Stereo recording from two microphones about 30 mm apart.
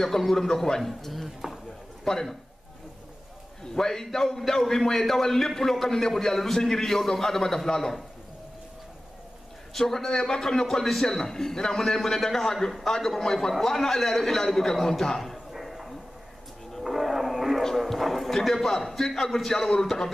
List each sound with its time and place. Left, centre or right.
0.2 s a man's voice: centre
3.7 s a man's voice: centre
9.8 s a man's voice: centre
15.3 s a sound: centre
17.6 s music: centre
18.4 s a man's voice: centre